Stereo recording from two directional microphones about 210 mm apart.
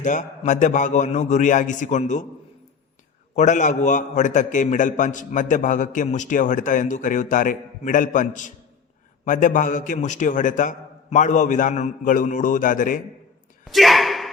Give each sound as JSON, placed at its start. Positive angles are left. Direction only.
{"t": 0.0, "sound": "a man's voice", "side_deg": 35}
{"t": 3.3, "sound": "a man's voice", "side_deg": 35}
{"t": 13.7, "sound": "a sound", "side_deg": 0}